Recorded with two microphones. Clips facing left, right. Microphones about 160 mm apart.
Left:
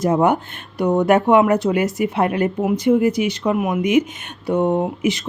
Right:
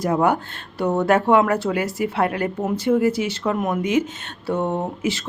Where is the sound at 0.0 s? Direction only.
20° left (ahead or behind).